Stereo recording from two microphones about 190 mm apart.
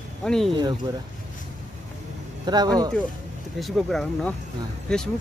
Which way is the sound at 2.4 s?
20° right (ahead or behind).